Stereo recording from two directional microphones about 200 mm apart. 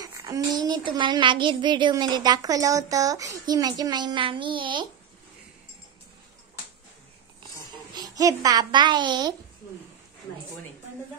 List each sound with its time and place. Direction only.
0.0 s a woman's voice: 15° right (ahead or behind)
7.9 s a child's voice: 20° right (ahead or behind)